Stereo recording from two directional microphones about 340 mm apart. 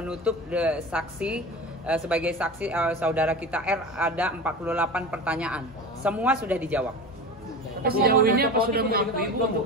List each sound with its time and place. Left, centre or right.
0.0 s speech: centre
7.8 s a man's voice: right